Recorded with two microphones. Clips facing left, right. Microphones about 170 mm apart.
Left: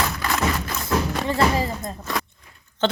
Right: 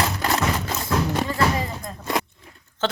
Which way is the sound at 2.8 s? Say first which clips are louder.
Left 3 dB; 5° right (ahead or behind).